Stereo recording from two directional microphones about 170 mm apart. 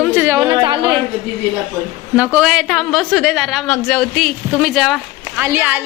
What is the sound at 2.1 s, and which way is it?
A woman's voice, 5° right (ahead or behind).